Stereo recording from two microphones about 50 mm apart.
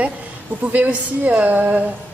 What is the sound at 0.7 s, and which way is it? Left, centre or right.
Speech, right.